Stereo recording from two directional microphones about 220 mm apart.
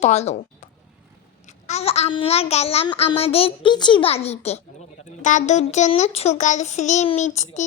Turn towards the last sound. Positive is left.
turn(degrees=30)  # may be behind; listen again after turning